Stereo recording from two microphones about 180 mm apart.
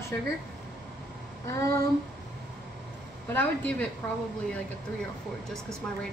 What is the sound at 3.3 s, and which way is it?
Speech, 10° left (ahead or behind).